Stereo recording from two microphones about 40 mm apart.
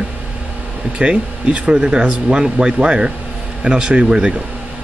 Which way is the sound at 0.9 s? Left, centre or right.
Right.